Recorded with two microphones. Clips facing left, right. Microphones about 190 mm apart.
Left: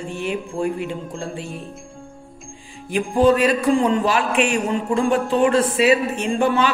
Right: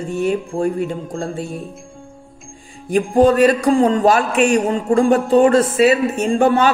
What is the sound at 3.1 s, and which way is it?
A man's voice, 45° right (ahead or behind).